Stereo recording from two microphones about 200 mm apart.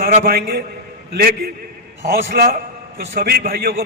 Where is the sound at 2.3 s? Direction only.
50° right (ahead or behind).